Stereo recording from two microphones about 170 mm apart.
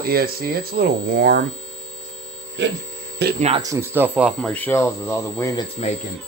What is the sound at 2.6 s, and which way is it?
Speech, 90° right.